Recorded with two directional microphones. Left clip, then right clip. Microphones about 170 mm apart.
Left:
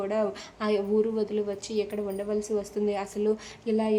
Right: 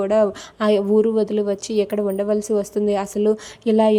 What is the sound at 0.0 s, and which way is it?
A woman's voice, 40° right (ahead or behind).